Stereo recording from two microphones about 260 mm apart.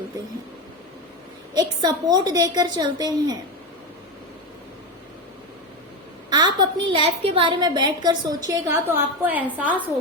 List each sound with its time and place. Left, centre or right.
1.5 s a woman's voice: centre
6.3 s a sound: centre
6.8 s a woman's voice: right